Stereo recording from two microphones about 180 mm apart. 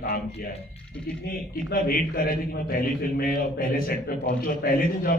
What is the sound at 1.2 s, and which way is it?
A man's voice, 55° left (ahead or behind).